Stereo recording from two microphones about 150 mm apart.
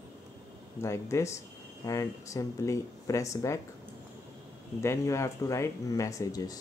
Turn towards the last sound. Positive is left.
turn(degrees=25)  # may be behind; listen again after turning